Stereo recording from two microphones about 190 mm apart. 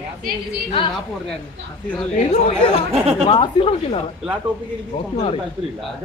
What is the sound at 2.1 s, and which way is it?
Speech, 30° left (ahead or behind).